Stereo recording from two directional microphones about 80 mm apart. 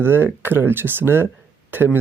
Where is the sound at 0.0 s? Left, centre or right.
Right.